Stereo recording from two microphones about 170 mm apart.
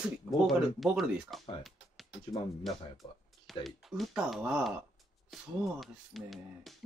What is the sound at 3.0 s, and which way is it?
Speech, 30° left (ahead or behind).